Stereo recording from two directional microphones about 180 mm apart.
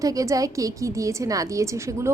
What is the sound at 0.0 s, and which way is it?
A woman's voice, 20° right (ahead or behind).